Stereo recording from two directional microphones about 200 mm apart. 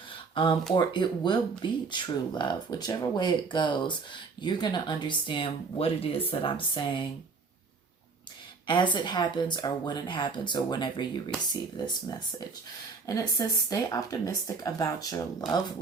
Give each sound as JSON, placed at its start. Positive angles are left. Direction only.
{"t": 0.3, "sound": "speech", "side_deg": 25}
{"t": 8.6, "sound": "speech", "side_deg": 25}
{"t": 13.1, "sound": "speech", "side_deg": 15}